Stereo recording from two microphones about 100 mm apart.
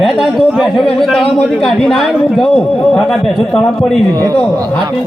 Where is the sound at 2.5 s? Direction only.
10° left (ahead or behind).